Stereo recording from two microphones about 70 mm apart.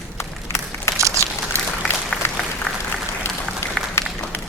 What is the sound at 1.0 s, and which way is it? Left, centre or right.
Crumpling, right.